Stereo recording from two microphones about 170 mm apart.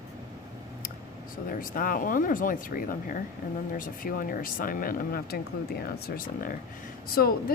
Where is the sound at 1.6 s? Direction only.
55° left (ahead or behind).